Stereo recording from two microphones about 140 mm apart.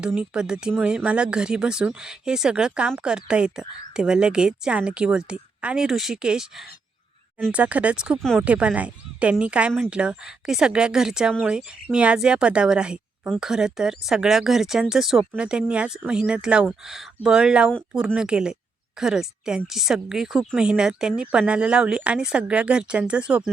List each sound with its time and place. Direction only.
0.0 s speech: 5° right (ahead or behind)